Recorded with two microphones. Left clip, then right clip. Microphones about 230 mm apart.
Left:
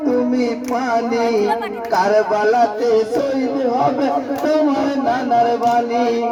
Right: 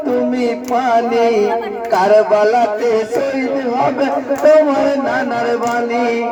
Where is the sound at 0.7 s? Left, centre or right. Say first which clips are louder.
Right 6 dB; right.